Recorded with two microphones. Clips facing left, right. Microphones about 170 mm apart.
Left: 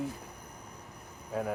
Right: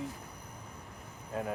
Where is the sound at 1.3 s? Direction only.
Centre (ahead or behind).